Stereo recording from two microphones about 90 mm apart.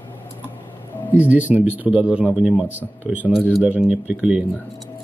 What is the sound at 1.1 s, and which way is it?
Speech, 15° right (ahead or behind).